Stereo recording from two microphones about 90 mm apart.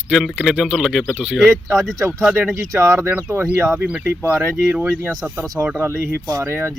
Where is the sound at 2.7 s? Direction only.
35° right (ahead or behind).